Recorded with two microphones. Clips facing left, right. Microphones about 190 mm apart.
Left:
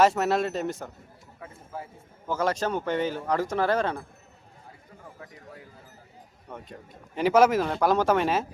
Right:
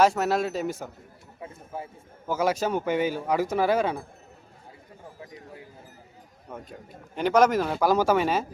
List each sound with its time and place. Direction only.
0.0 s speech: centre (ahead or behind)
1.4 s speech: 20° right (ahead or behind)
2.2 s speech: 5° right (ahead or behind)
6.5 s speech: 5° right (ahead or behind)